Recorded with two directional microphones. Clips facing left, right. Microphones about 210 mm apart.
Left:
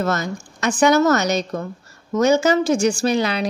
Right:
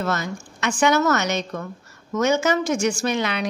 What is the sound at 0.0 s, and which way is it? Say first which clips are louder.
A woman's voice: left 3 dB; 40° left (ahead or behind).